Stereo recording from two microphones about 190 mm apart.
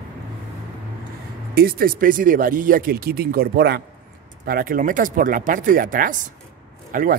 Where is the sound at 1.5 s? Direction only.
55° right (ahead or behind).